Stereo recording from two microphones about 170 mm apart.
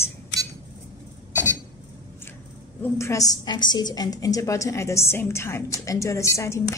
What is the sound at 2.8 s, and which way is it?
A woman's voice, 15° left (ahead or behind).